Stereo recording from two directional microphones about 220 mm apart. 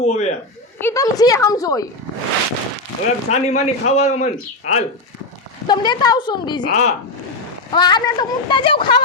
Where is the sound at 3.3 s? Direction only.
30° left (ahead or behind).